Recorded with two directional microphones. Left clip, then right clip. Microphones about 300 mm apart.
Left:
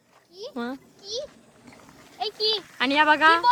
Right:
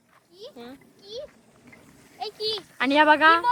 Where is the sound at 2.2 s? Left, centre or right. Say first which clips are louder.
Left 4 dB; left.